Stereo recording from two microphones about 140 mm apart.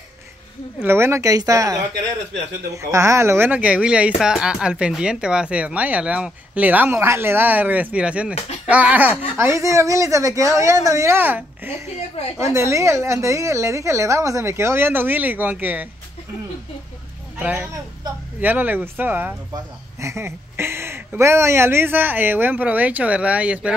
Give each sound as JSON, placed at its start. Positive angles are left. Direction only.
{"t": 0.7, "sound": "a woman's voice", "side_deg": -15}
{"t": 9.4, "sound": "a woman's voice", "side_deg": -20}
{"t": 17.4, "sound": "speech", "side_deg": -10}